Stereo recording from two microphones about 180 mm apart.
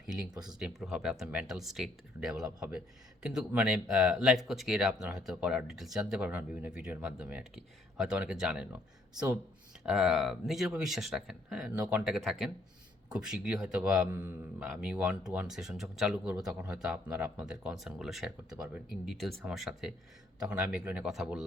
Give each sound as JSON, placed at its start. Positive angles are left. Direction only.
{"t": 0.1, "sound": "speech", "side_deg": -5}
{"t": 2.4, "sound": "speech", "side_deg": -20}
{"t": 3.2, "sound": "speech", "side_deg": -5}
{"t": 9.8, "sound": "speech", "side_deg": 0}